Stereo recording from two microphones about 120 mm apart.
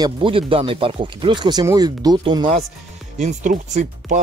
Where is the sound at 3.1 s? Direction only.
85° right.